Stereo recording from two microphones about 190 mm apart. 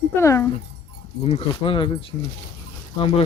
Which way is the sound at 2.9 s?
30° left (ahead or behind).